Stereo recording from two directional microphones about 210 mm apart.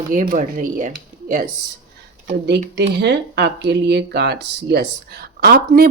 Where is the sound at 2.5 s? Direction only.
55° right (ahead or behind).